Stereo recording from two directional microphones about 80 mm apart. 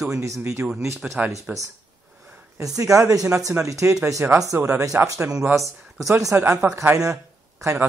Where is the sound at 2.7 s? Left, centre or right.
Right.